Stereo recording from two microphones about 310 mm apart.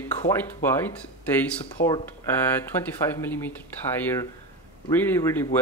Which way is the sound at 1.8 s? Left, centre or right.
Left.